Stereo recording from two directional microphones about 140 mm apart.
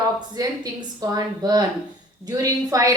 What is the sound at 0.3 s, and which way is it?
A woman's voice, 30° right (ahead or behind).